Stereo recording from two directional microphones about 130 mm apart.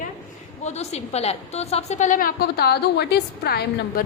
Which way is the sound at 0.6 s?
55° left (ahead or behind).